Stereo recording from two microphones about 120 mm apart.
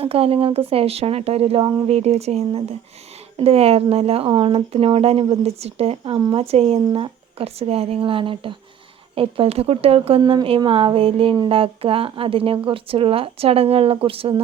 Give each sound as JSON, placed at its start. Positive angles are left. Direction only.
{"t": 0.0, "sound": "speech", "side_deg": -55}